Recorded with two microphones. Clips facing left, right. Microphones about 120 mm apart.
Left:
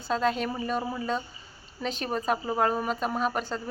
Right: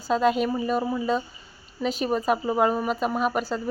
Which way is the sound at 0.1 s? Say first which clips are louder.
Right 5 dB; 10° right (ahead or behind).